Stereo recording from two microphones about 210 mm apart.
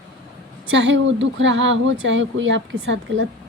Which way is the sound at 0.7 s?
60° right (ahead or behind).